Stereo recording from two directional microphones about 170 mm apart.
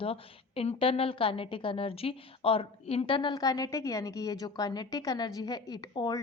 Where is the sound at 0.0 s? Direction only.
35° left (ahead or behind).